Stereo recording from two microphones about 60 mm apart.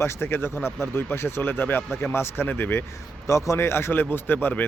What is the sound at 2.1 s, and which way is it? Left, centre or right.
Speech, left.